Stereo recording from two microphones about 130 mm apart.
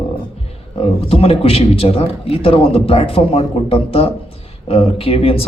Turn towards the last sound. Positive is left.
turn(degrees=45)  # may be behind; listen again after turning